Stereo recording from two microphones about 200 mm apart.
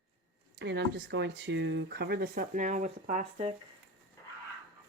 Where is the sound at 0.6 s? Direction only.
60° right (ahead or behind); by 3.5 s 35° right (ahead or behind).